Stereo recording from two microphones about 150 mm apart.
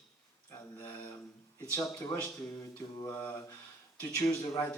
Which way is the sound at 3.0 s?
15° left (ahead or behind).